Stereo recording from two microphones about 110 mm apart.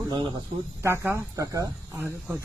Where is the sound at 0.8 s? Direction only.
25° right (ahead or behind).